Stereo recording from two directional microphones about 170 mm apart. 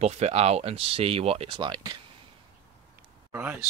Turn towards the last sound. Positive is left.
turn(degrees=-10)  # may be behind; listen again after turning